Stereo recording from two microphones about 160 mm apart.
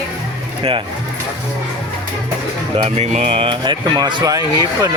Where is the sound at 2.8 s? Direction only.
45° right (ahead or behind); by 4.4 s 25° right (ahead or behind).